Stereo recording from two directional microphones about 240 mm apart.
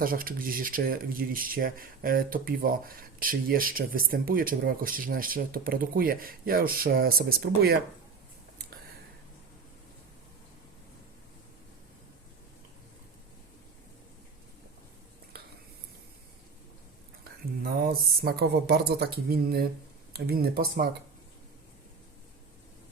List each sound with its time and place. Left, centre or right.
0.0 s speech: right
17.6 s speech: right